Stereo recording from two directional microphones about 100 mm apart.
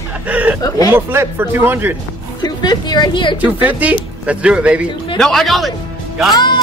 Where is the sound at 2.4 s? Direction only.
45° left (ahead or behind).